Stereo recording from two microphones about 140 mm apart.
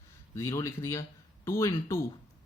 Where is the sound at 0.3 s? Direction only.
20° left (ahead or behind).